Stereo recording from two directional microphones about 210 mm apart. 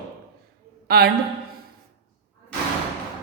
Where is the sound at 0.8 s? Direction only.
50° right (ahead or behind).